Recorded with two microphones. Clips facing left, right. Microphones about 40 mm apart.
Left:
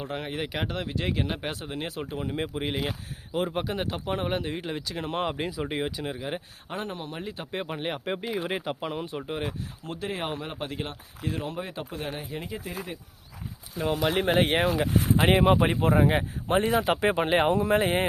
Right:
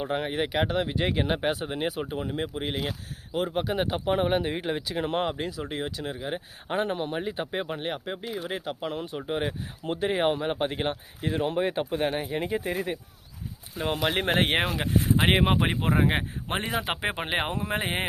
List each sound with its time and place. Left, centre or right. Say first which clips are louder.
0.0 s speech: right 4 dB; centre
2.3 s speech: even; centre
3.8 s speech: right 4 dB; centre
5.3 s speech: left 1 dB; centre
6.7 s speech: right 7 dB; right
7.6 s speech: even; centre
8.0 s speech: left 3 dB; centre
8.8 s speech: even; centre
9.3 s speech: right 4 dB; centre
9.8 s speech: right 8 dB; right
13.7 s speech: left 1 dB; right
15.1 s speech: left 2 dB; right
16.7 s speech: left 5 dB; right
17.1 s speech: left 8 dB; centre